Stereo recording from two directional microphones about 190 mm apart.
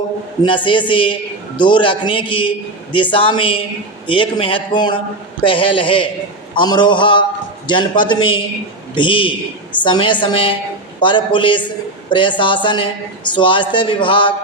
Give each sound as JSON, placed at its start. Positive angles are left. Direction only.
{"t": 0.4, "sound": "a man's voice", "side_deg": 25}